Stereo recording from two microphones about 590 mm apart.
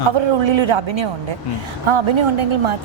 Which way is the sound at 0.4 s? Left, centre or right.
Right.